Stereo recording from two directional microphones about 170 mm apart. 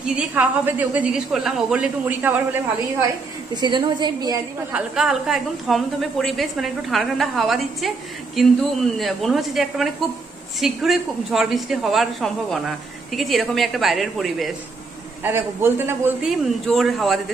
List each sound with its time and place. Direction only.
0.0 s a woman's voice: 5° right (ahead or behind)
3.6 s a woman's voice: 25° right (ahead or behind)
4.7 s a woman's voice: 5° right (ahead or behind)
15.2 s a woman's voice: 15° right (ahead or behind)
16.3 s a woman's voice: centre (ahead or behind)